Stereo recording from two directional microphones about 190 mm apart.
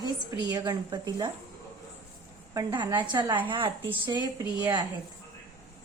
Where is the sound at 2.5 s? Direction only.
20° right (ahead or behind).